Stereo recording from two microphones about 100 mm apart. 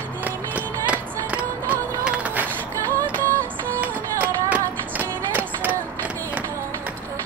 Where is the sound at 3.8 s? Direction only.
15° right (ahead or behind).